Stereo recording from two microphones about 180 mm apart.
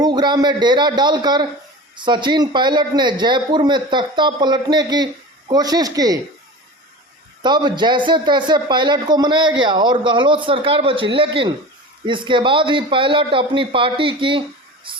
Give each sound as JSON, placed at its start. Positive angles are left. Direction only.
{"t": 0.0, "sound": "a man's voice", "side_deg": -25}
{"t": 7.4, "sound": "a man's voice", "side_deg": -25}